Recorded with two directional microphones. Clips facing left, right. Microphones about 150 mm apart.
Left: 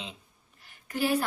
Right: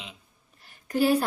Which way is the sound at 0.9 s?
40° right (ahead or behind).